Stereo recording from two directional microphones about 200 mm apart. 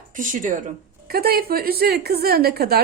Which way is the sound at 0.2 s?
40° right (ahead or behind).